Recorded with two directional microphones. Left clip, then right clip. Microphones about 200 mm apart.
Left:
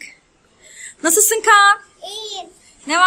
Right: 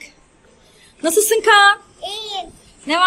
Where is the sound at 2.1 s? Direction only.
15° left (ahead or behind).